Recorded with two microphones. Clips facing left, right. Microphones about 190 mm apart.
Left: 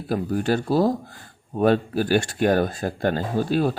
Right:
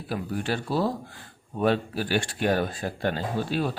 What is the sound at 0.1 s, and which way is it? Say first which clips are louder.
Speech: left 7 dB; 45° left (ahead or behind).